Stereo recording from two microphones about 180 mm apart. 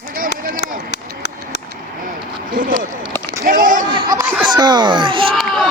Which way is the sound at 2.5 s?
50° right (ahead or behind).